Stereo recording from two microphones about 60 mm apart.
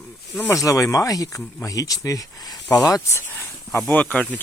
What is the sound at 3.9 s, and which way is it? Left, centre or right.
Speech, left.